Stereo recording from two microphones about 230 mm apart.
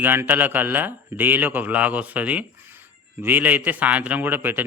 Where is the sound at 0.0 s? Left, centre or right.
Centre.